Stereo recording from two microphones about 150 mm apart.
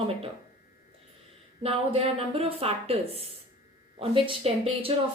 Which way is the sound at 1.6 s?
40° right (ahead or behind).